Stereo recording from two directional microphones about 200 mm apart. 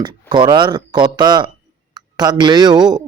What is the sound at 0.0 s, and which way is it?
Speech, 20° right (ahead or behind).